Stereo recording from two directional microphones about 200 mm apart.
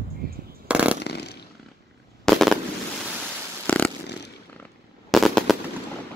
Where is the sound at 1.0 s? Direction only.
55° left (ahead or behind).